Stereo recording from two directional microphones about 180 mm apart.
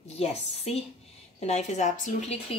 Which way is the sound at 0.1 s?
35° left (ahead or behind).